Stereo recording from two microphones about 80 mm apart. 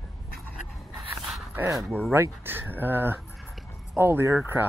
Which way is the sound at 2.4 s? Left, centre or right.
Right.